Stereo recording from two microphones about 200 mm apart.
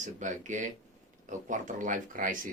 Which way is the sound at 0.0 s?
40° right (ahead or behind).